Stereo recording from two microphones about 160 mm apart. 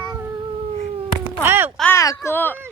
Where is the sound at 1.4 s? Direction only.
15° right (ahead or behind).